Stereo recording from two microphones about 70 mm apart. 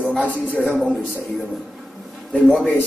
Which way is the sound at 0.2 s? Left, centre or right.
Left.